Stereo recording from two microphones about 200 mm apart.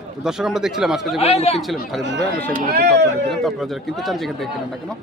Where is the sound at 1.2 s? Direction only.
30° left (ahead or behind).